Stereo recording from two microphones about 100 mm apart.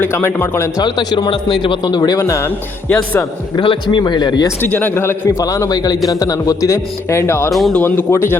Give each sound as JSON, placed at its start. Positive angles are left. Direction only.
{"t": 0.0, "sound": "a man's voice", "side_deg": 20}
{"t": 0.8, "sound": "speech", "side_deg": 45}
{"t": 2.1, "sound": "a man's voice", "side_deg": 30}
{"t": 3.5, "sound": "speech", "side_deg": 50}
{"t": 4.7, "sound": "a man's voice", "side_deg": 20}
{"t": 5.3, "sound": "speech", "side_deg": 30}
{"t": 7.5, "sound": "speech", "side_deg": 0}
{"t": 7.8, "sound": "a man's voice", "side_deg": 20}